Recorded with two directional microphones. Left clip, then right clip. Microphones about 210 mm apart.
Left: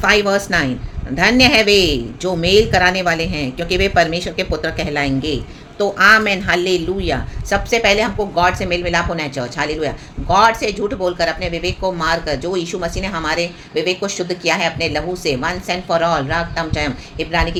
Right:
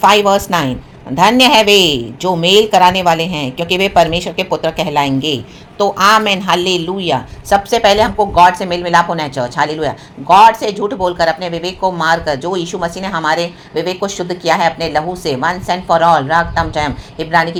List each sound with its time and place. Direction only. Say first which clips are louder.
0.0 s a woman's voice: right 5 dB; 15° right (ahead or behind)